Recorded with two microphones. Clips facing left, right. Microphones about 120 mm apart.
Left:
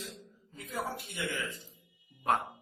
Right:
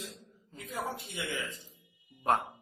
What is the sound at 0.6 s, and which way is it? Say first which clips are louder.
Speech: even; 20° right (ahead or behind).